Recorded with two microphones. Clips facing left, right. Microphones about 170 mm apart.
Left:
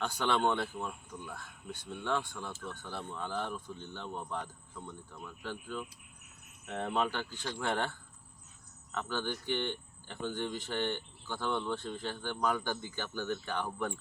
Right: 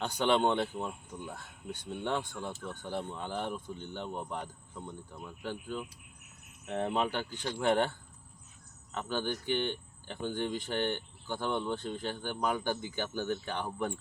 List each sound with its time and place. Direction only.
0.0 s speech: 20° right (ahead or behind)